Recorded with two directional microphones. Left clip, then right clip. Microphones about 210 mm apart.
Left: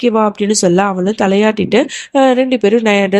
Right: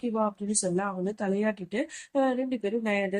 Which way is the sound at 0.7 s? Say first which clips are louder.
Left 17 dB; 45° left (ahead or behind).